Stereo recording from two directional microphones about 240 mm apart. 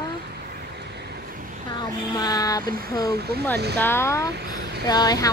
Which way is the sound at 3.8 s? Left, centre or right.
Centre.